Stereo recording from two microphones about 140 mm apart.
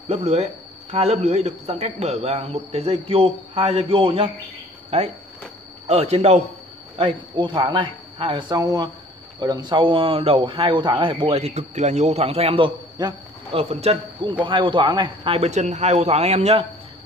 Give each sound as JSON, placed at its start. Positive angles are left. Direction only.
{"t": 0.1, "sound": "speech", "side_deg": -50}
{"t": 7.0, "sound": "speech", "side_deg": -35}
{"t": 13.6, "sound": "speech", "side_deg": -50}
{"t": 14.4, "sound": "speech", "side_deg": -35}